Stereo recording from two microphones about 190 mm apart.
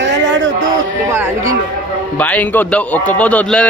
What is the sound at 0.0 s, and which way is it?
Music, 70° right (ahead or behind).